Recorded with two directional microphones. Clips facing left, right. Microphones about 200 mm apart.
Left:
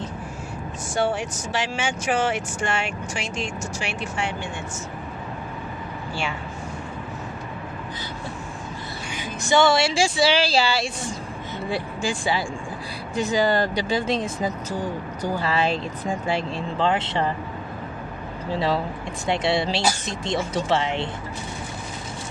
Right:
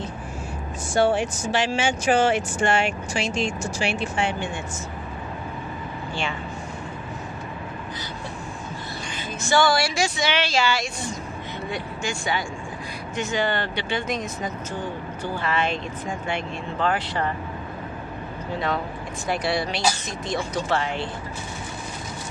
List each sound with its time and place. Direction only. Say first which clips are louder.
1.8 s speech: right 3 dB; 30° right (ahead or behind)
9.1 s speech: left 2 dB; 15° left (ahead or behind)
18.5 s speech: left 3 dB; 30° left (ahead or behind)